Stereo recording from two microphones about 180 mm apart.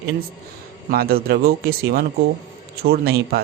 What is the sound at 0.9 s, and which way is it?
A man's voice, 55° right (ahead or behind).